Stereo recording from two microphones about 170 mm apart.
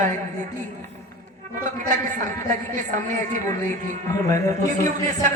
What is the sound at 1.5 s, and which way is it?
A woman's voice, 50° right (ahead or behind).